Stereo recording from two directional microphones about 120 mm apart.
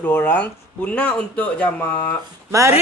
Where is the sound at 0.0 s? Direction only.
15° left (ahead or behind).